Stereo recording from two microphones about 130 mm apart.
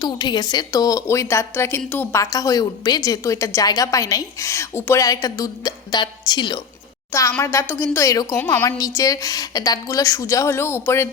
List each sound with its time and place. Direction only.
0.0 s a woman's voice: 30° left (ahead or behind); by 2.2 s 15° left (ahead or behind)
2.3 s a woman's voice: 25° left (ahead or behind)
7.1 s a woman's voice: 20° left (ahead or behind)